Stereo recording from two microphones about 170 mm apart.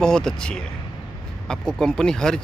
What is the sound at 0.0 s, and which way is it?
Speech, 5° left (ahead or behind).